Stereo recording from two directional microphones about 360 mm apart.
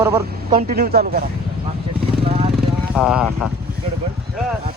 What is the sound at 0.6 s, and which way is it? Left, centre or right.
Speech, right.